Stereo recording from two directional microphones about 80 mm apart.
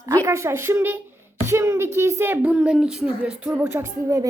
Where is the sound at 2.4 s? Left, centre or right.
Centre.